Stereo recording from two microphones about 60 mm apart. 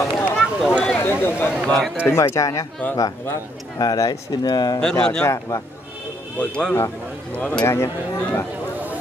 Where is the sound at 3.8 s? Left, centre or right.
Left.